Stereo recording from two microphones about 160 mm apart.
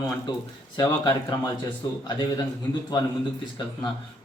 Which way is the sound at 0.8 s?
30° left (ahead or behind).